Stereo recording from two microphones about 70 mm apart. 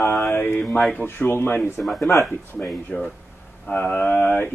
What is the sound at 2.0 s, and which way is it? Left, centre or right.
Speech, left.